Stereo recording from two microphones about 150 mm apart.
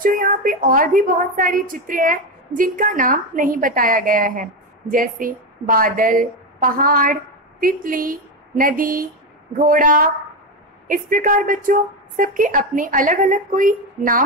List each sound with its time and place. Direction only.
0.0 s a woman's voice: 65° right (ahead or behind)